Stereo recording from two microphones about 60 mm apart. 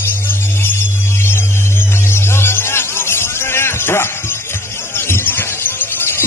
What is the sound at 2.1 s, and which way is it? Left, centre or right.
Music, left.